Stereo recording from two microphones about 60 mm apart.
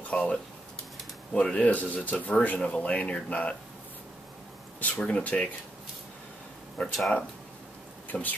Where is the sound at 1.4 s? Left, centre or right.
Left.